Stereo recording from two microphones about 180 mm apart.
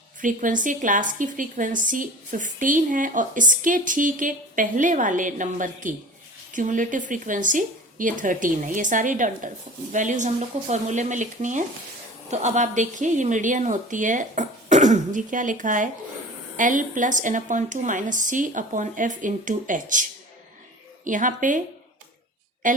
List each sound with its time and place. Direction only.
0.2 s a woman's voice: 45° right (ahead or behind)
22.6 s a woman's voice: 45° right (ahead or behind)